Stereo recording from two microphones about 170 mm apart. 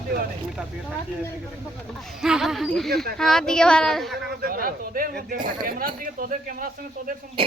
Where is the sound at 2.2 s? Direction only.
5° right (ahead or behind).